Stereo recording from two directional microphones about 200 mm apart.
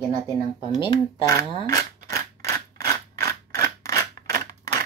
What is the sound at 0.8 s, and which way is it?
Speech, 20° left (ahead or behind).